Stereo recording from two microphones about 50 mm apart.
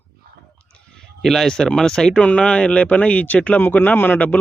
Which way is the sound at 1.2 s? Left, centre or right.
Centre.